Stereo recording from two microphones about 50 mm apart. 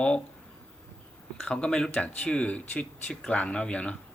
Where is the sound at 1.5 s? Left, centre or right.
Centre.